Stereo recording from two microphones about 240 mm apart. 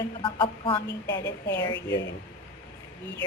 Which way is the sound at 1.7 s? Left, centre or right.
Left.